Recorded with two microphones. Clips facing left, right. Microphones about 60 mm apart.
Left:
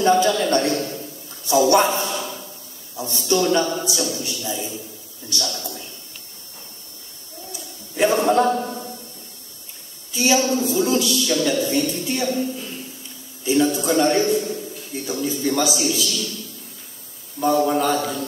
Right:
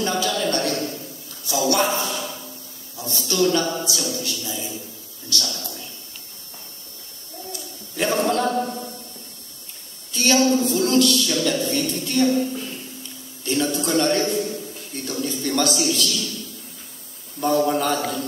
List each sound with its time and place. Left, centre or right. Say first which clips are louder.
0.0 s a man's voice: left 6 dB; left
7.5 s a sound: left 3 dB; centre
8.6 s a sound: even; left
10.1 s a woman's voice: right 1 dB; centre
13.4 s a man's voice: left 4 dB; centre
17.4 s speech: left 1 dB; centre